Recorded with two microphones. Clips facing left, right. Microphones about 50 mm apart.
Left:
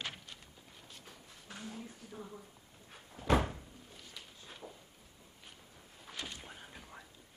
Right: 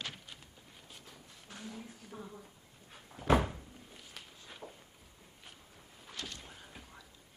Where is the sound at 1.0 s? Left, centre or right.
Left.